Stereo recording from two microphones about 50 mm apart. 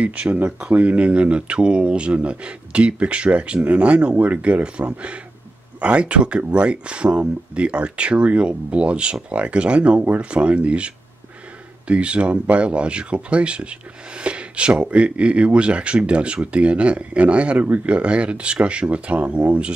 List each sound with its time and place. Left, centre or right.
0.0 s speech: right
11.9 s speech: right